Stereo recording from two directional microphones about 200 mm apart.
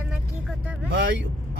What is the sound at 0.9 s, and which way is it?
Speech, 65° right (ahead or behind).